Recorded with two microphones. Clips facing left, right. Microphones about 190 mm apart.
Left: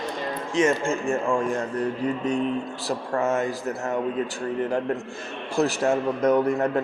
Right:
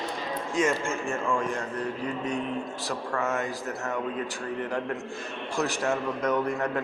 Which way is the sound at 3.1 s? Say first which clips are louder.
Left 5 dB; 35° left (ahead or behind).